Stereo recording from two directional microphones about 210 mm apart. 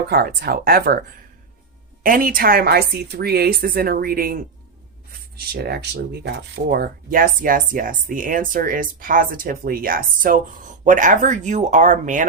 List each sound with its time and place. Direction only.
0.1 s speech: 50° right (ahead or behind)
2.0 s speech: 45° right (ahead or behind)
5.5 s speech: 50° right (ahead or behind)